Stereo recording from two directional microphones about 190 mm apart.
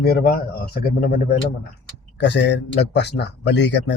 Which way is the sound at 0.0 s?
55° left (ahead or behind).